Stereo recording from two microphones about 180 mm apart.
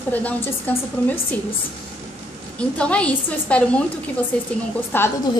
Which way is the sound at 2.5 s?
5° left (ahead or behind).